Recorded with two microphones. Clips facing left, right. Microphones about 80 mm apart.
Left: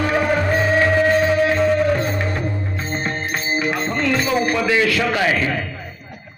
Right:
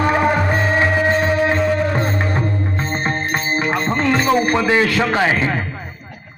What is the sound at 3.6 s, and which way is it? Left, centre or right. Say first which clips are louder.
Music: right 3 dB; right.